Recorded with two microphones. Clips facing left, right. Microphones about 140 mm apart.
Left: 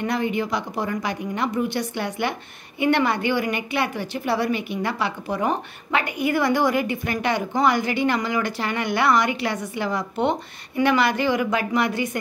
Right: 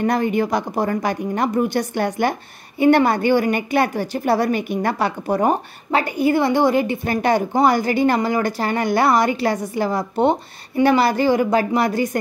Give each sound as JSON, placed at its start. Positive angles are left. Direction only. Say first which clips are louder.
{"t": 0.0, "sound": "a woman's voice", "louder": "right 5 dB", "side_deg": -45}
{"t": 7.2, "sound": "a woman's voice", "louder": "right 6 dB", "side_deg": -40}